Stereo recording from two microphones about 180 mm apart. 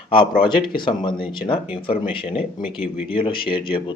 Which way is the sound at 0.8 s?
25° left (ahead or behind).